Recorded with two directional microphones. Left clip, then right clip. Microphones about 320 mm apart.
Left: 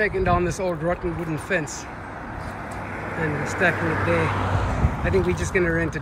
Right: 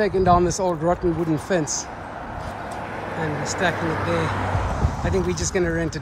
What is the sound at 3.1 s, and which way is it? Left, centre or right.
Speech, right.